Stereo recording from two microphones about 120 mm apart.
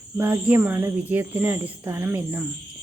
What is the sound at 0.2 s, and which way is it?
Speech, 15° right (ahead or behind).